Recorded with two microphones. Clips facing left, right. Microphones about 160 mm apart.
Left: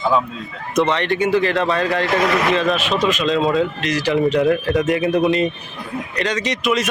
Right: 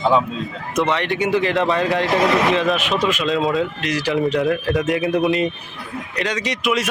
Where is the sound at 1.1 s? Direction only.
20° right (ahead or behind).